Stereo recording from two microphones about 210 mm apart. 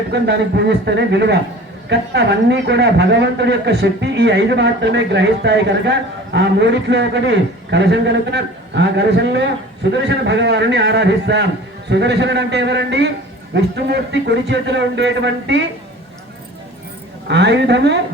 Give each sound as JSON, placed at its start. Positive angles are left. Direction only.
{"t": 0.1, "sound": "a man's voice", "side_deg": -55}
{"t": 17.2, "sound": "a man's voice", "side_deg": -55}